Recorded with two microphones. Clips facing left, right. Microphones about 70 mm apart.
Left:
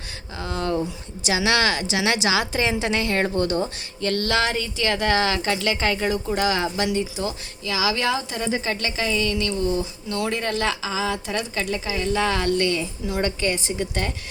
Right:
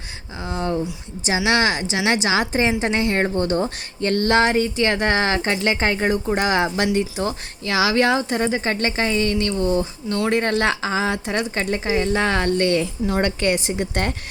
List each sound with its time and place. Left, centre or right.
0.3 s a woman's voice: right